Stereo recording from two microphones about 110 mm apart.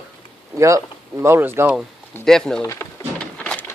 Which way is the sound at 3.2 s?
10° left (ahead or behind).